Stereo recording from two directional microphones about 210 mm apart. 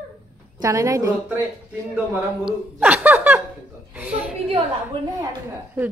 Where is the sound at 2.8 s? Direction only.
5° right (ahead or behind).